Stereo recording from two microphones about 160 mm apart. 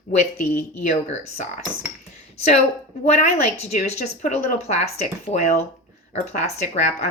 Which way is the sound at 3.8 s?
60° left (ahead or behind).